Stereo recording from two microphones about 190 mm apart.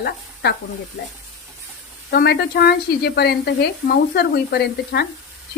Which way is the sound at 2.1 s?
55° left (ahead or behind).